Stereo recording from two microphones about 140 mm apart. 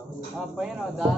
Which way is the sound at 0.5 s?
Centre (ahead or behind).